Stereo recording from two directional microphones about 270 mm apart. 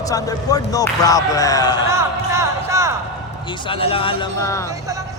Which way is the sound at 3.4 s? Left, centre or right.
Centre.